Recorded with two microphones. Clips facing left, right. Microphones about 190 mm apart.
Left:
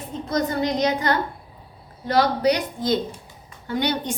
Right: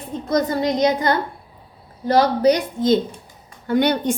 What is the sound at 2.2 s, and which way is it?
Speech, 40° right (ahead or behind).